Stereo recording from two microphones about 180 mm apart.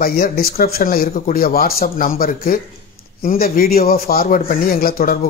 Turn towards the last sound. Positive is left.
turn(degrees=55)  # may be behind; listen again after turning